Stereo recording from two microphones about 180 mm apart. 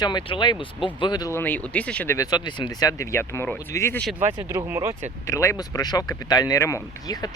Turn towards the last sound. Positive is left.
turn(degrees=20)  # may be behind; listen again after turning